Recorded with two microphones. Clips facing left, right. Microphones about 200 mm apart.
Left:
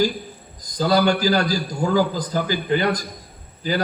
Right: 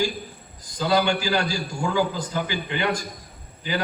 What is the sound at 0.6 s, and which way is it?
A man's voice, 40° left (ahead or behind).